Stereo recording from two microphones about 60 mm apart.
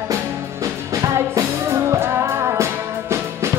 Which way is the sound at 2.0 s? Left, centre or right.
Right.